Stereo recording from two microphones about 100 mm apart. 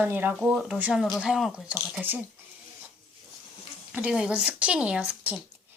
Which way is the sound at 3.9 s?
15° right (ahead or behind).